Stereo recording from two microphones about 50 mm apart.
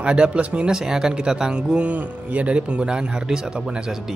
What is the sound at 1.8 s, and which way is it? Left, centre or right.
Speech, right.